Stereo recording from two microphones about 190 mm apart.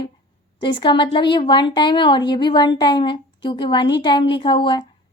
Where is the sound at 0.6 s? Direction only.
25° left (ahead or behind).